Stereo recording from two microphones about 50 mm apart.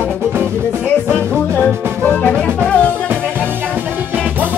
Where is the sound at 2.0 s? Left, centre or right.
Left.